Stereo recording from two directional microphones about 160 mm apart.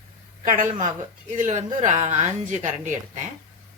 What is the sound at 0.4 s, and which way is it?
A woman's voice, 55° right (ahead or behind).